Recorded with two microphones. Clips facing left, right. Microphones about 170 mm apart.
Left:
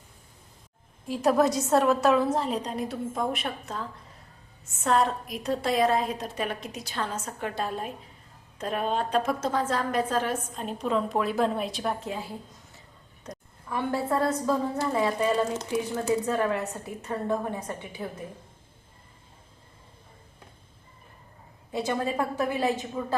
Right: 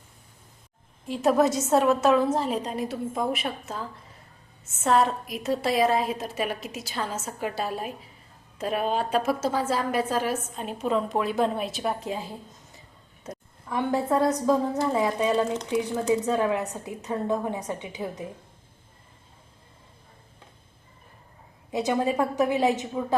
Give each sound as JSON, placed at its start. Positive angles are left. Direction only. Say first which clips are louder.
{"t": 1.0, "sound": "a woman's voice", "louder": "right 1 dB", "side_deg": 0}
{"t": 13.2, "sound": "a woman's voice", "louder": "right 2 dB", "side_deg": -15}
{"t": 21.7, "sound": "a woman's voice", "louder": "right 3 dB", "side_deg": -15}